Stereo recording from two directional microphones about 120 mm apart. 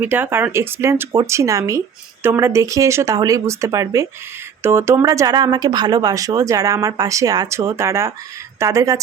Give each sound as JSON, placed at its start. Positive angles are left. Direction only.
{"t": 0.0, "sound": "speech", "side_deg": -15}